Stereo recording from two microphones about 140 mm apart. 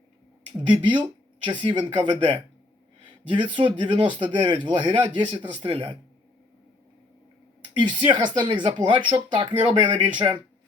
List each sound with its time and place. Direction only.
0.6 s speech: 35° right (ahead or behind)
3.5 s speech: 35° right (ahead or behind)
7.7 s speech: 35° right (ahead or behind)